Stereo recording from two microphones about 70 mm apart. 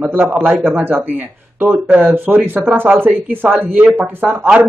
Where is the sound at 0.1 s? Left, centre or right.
Right.